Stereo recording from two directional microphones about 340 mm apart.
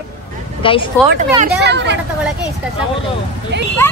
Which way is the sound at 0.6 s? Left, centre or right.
Centre.